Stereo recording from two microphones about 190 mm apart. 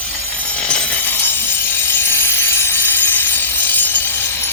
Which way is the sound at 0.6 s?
5° left (ahead or behind).